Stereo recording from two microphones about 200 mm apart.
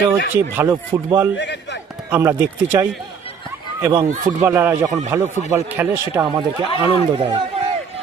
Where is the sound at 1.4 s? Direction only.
60° left (ahead or behind).